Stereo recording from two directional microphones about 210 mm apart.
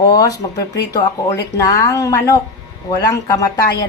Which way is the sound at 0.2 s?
15° left (ahead or behind).